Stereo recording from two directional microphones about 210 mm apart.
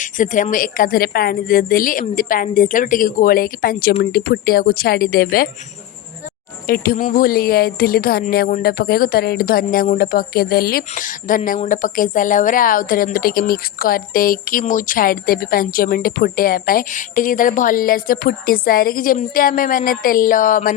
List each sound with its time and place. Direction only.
0.0 s a woman's voice: 40° left (ahead or behind)
6.7 s speech: 45° left (ahead or behind)